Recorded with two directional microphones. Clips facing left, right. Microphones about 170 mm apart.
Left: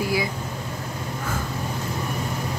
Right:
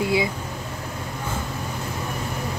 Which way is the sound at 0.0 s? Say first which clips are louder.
Right 2 dB; 25° right (ahead or behind).